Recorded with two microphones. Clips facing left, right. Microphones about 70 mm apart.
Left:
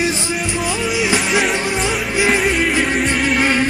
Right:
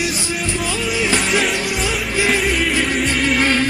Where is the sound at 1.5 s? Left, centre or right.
Left.